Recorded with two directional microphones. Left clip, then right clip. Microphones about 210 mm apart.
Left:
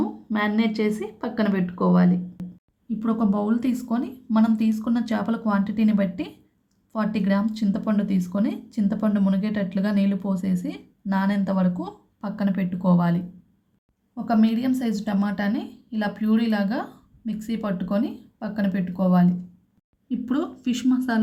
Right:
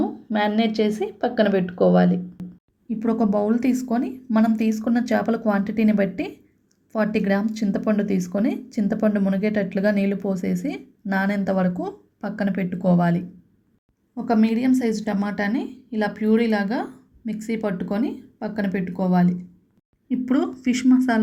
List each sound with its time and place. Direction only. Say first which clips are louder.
0.0 s speech: right 3 dB; 15° right (ahead or behind)
14.3 s speech: right 2 dB; 15° right (ahead or behind)